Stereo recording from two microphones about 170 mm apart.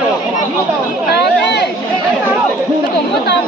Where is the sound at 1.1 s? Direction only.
80° left.